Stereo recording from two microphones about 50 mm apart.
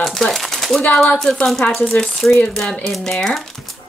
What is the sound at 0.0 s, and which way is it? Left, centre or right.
Speech, centre.